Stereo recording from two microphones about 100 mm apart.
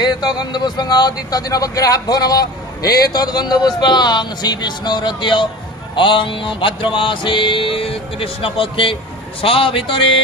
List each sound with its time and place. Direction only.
0.0 s speech: 40° left (ahead or behind)
5.9 s music: 55° left (ahead or behind)